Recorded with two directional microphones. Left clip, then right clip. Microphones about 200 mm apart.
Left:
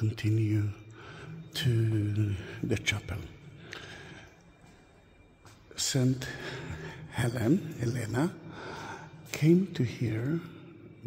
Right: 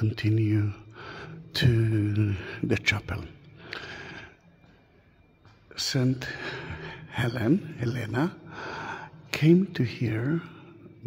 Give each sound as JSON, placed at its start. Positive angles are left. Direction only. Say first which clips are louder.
{"t": 0.0, "sound": "speech", "louder": "right 5 dB", "side_deg": -15}
{"t": 5.8, "sound": "speech", "louder": "right 3 dB", "side_deg": -5}